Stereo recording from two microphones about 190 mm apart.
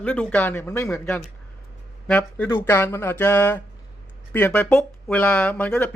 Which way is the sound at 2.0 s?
10° left (ahead or behind).